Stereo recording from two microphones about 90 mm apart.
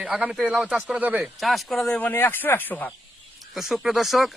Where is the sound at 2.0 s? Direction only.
20° left (ahead or behind).